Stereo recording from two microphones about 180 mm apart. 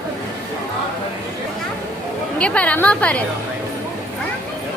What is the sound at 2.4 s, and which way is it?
Speech, 5° left (ahead or behind).